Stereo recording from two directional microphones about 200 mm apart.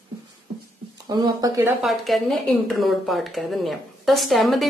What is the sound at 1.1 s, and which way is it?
Speech, 15° right (ahead or behind).